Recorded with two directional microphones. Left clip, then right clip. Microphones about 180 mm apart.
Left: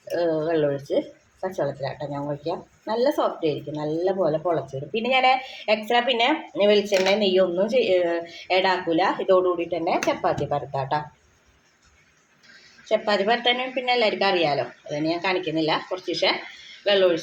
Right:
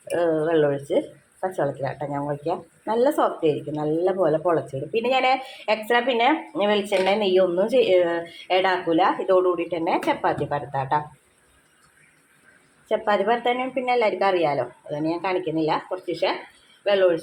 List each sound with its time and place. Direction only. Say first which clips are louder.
0.1 s speech: right 2 dB; 15° right (ahead or behind)
12.9 s speech: even; 10° right (ahead or behind)